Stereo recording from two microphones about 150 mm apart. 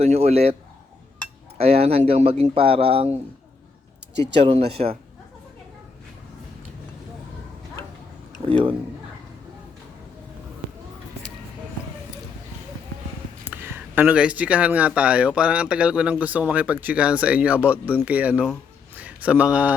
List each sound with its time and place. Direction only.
0.0 s a man's voice: 45° right (ahead or behind)
1.5 s speech: 45° right (ahead or behind)
4.7 s speech: 40° right (ahead or behind)
8.4 s speech: 35° right (ahead or behind)
13.4 s speech: 10° right (ahead or behind)